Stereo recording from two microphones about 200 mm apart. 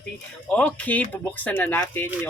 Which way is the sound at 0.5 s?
5° left (ahead or behind).